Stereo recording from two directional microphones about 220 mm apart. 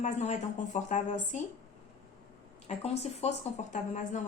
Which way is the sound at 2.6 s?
30° left (ahead or behind).